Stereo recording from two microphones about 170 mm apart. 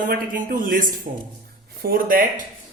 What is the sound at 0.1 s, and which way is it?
Speech, 55° right (ahead or behind).